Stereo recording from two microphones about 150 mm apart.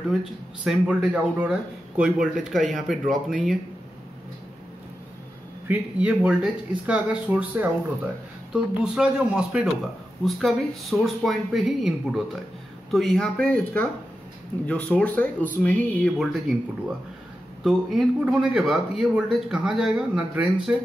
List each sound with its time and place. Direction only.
0.1 s a man's voice: centre (ahead or behind)
5.7 s speech: 10° right (ahead or behind)
8.8 s a man's voice: 5° right (ahead or behind)
16.2 s a man's voice: centre (ahead or behind)